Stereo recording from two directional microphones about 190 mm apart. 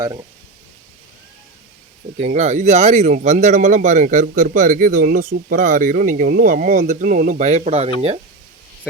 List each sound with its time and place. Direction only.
0.0 s speech: 20° right (ahead or behind)
2.1 s speech: 35° right (ahead or behind)